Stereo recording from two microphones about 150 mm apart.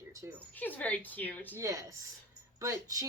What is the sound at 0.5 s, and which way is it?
Speech, 10° left (ahead or behind).